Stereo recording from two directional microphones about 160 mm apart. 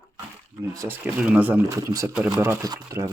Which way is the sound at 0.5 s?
20° right (ahead or behind).